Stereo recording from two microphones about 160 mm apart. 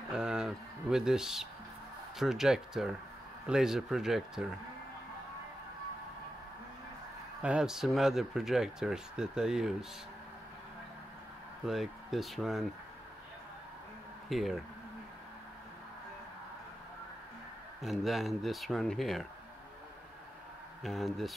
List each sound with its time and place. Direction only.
0.1 s a sound: 5° right (ahead or behind)
2.1 s speech: centre (ahead or behind)
7.4 s speech: 5° right (ahead or behind)
11.6 s speech: centre (ahead or behind)
14.3 s speech: centre (ahead or behind)
17.8 s speech: centre (ahead or behind)
20.8 s speech: centre (ahead or behind)